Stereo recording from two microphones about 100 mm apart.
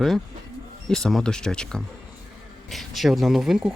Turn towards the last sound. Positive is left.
turn(degrees=-5)  # may be behind; listen again after turning